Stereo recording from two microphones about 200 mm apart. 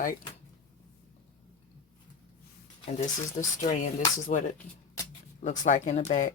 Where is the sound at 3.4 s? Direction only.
35° left (ahead or behind).